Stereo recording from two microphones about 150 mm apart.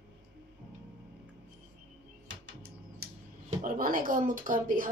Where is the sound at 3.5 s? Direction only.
65° right (ahead or behind).